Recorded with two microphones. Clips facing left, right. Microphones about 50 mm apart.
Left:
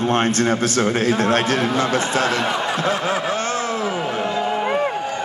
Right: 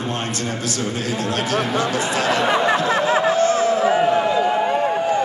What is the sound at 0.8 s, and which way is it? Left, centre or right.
A man's voice, left.